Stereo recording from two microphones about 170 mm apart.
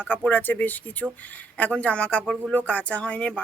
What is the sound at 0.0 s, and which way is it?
Speech, 10° left (ahead or behind).